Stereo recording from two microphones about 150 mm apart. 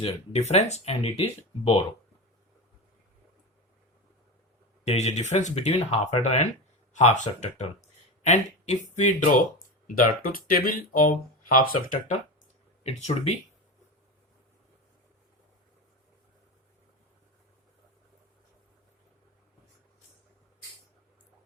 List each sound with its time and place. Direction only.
0.0 s speech: 45° left (ahead or behind)
4.9 s speech: 50° left (ahead or behind)
9.8 s speech: 70° left (ahead or behind)
12.8 s speech: 45° left (ahead or behind)